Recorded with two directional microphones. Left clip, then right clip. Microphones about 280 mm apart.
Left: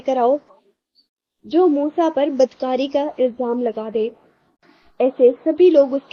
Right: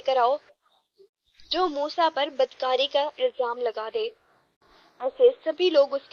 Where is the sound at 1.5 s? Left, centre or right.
Right.